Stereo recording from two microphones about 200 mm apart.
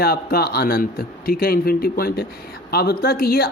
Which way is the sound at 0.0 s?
50° left (ahead or behind).